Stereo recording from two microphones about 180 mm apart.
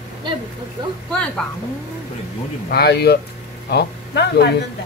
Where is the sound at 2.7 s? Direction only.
65° left (ahead or behind).